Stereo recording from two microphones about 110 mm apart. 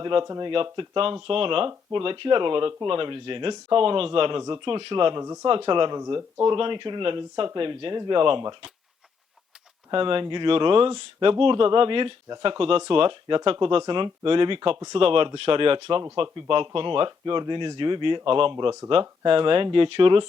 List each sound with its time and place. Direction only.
0.0 s speech: 45° right (ahead or behind)
0.5 s speech: 55° right (ahead or behind)
5.2 s speech: 30° right (ahead or behind)
5.5 s speech: 50° right (ahead or behind)
9.9 s speech: 50° right (ahead or behind)